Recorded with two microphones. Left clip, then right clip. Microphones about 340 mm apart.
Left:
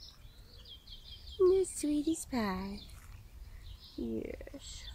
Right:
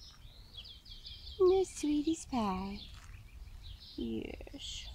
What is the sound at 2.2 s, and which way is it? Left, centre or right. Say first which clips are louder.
Speech: right 1 dB; centre.